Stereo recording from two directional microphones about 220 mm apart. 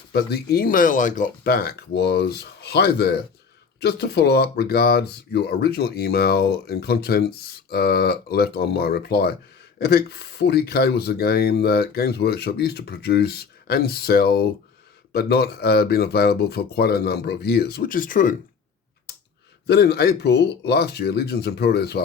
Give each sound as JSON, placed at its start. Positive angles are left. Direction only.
{"t": 0.1, "sound": "speech", "side_deg": 45}
{"t": 19.6, "sound": "speech", "side_deg": 50}